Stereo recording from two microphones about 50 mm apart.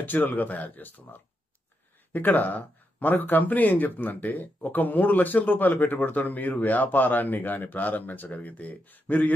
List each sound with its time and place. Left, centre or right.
0.0 s speech: left